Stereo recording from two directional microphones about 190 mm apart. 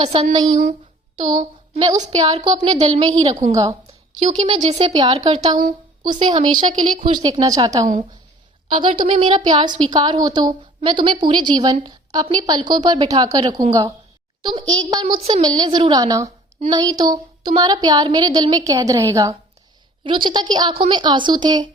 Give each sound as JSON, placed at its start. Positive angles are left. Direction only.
{"t": 0.0, "sound": "speech", "side_deg": -35}
{"t": 2.0, "sound": "a woman's voice", "side_deg": -25}
{"t": 2.4, "sound": "speech", "side_deg": -40}
{"t": 3.5, "sound": "a woman's voice", "side_deg": -20}
{"t": 4.2, "sound": "speech", "side_deg": -40}
{"t": 4.7, "sound": "a woman's voice", "side_deg": -25}
{"t": 8.9, "sound": "speech", "side_deg": -40}
{"t": 9.3, "sound": "a woman's voice", "side_deg": -25}
{"t": 14.7, "sound": "a woman's voice", "side_deg": -20}